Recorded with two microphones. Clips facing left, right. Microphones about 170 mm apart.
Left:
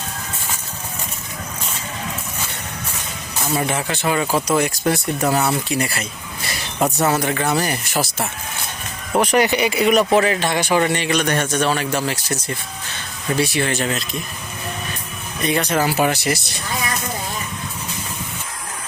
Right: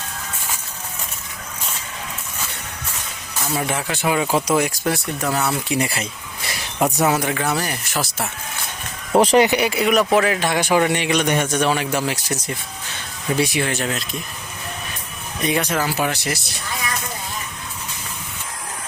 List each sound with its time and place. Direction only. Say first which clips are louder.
3.5 s a man's voice: left 2 dB; centre (ahead or behind); by 4.5 s 20° right (ahead or behind)
4.5 s a man's voice: left 1 dB; 5° right (ahead or behind)
5.3 s speech: left 2 dB; 10° left (ahead or behind)
5.6 s speech: even; 20° right (ahead or behind)
6.7 s speech: even; 10° right (ahead or behind)
9.1 s speech: right 3 dB; 30° right (ahead or behind)
9.5 s a man's voice: left 1 dB; 5° right (ahead or behind)
13.7 s speech: left 2 dB; 5° right (ahead or behind)
15.4 s a man's voice: left 1 dB; 10° right (ahead or behind)
15.7 s speech: left 3 dB; 5° left (ahead or behind)